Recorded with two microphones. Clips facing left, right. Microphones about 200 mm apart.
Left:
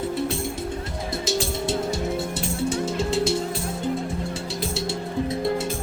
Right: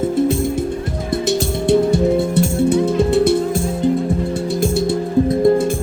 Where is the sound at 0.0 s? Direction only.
50° right (ahead or behind).